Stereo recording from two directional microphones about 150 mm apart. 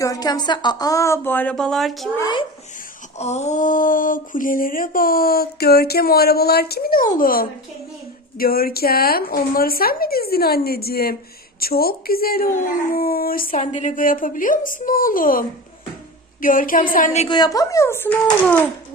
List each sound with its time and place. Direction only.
0.0 s speech: 25° left (ahead or behind); by 2.0 s centre (ahead or behind)
2.2 s a child's voice: 30° left (ahead or behind)
3.2 s speech: 50° left (ahead or behind); by 7.4 s 70° left (ahead or behind)
8.4 s a woman's voice: 80° left; by 17.2 s 55° left (ahead or behind)
17.2 s speech: 30° left (ahead or behind); by 18.7 s 10° left (ahead or behind)